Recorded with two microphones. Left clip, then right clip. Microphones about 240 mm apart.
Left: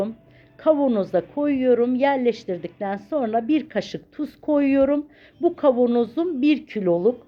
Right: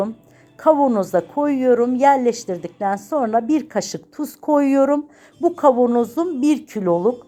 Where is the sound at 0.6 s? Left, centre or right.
Centre.